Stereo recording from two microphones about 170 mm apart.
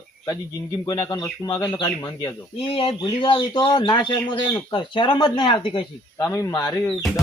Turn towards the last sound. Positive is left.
turn(degrees=15)  # may be behind; listen again after turning